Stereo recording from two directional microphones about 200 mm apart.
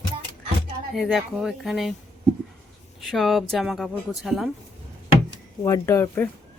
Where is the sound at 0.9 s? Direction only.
Centre (ahead or behind).